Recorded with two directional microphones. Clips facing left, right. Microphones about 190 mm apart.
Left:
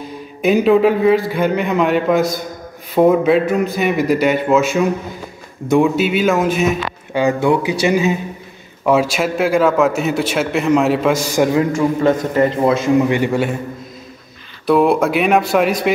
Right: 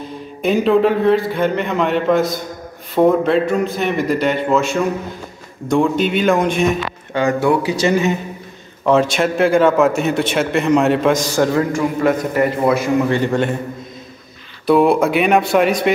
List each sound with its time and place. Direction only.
0.4 s a man's voice: 5° left (ahead or behind)
7.2 s a man's voice: 15° left (ahead or behind)
13.2 s speech: 5° left (ahead or behind)
14.7 s a man's voice: centre (ahead or behind)